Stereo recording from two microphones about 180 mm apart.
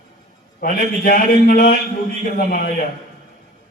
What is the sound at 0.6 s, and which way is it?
A man's voice, 55° left (ahead or behind).